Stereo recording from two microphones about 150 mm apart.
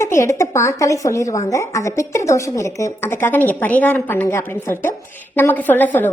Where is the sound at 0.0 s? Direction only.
20° left (ahead or behind).